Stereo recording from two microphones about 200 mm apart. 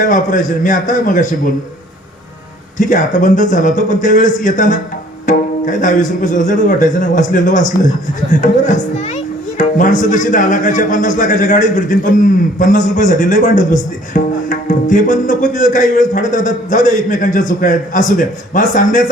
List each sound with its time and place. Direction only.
0.0 s speech: 40° left (ahead or behind)
2.7 s speech: 40° left (ahead or behind)